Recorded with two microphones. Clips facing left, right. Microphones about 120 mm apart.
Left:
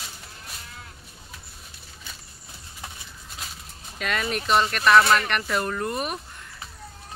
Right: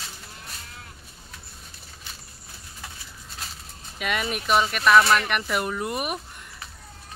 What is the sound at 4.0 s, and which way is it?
Speech, 10° right (ahead or behind).